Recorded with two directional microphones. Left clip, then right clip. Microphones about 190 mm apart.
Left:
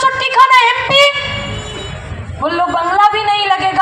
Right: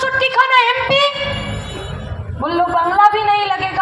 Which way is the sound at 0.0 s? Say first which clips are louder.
Left 4 dB; 35° left (ahead or behind).